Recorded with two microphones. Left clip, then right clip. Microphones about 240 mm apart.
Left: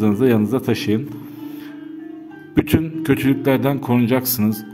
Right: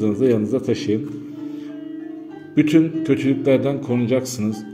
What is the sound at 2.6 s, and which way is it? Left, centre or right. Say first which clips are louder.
A man's voice: right 3 dB; left.